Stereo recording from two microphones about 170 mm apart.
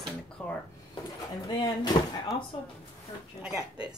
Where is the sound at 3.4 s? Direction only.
5° right (ahead or behind).